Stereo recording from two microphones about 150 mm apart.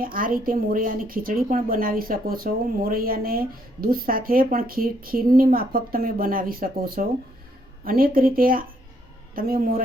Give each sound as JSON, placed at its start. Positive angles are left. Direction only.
{"t": 0.0, "sound": "a man's voice", "side_deg": -70}